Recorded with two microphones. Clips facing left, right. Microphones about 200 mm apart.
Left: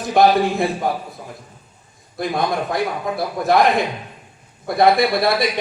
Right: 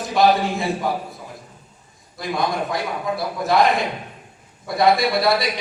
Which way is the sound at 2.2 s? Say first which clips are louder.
Left 2 dB; 55° left (ahead or behind).